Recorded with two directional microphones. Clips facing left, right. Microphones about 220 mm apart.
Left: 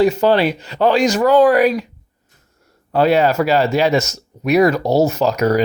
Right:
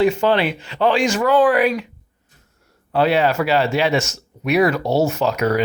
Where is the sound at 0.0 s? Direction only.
40° left (ahead or behind).